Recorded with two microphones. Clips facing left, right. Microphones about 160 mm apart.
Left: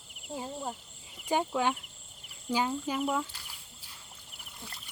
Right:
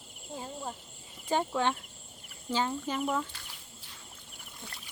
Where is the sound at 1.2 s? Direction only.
10° left (ahead or behind).